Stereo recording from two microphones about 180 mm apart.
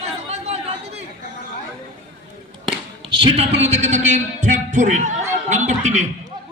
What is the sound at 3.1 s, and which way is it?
A man's voice, 25° right (ahead or behind).